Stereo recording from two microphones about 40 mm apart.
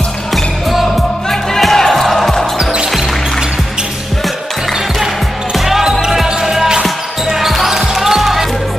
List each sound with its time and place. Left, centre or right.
1.6 s music: centre
5.7 s music: centre
7.3 s basketball bounce: centre